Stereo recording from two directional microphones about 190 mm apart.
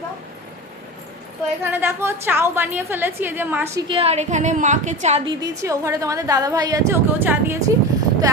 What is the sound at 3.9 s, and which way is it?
A woman's voice, 30° right (ahead or behind).